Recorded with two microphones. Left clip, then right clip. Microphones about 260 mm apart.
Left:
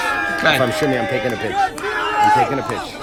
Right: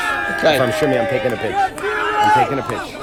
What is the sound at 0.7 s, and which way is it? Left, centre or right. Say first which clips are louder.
Speech: right 2 dB; centre.